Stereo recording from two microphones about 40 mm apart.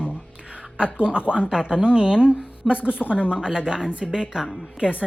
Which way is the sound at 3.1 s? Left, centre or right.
Right.